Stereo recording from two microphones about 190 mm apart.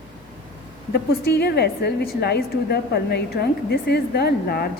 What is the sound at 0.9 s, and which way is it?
A woman's voice, 55° left (ahead or behind).